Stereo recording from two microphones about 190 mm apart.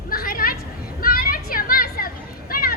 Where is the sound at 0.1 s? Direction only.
50° left (ahead or behind).